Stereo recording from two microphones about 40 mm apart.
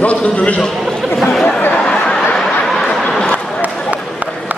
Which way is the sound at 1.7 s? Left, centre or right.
Left.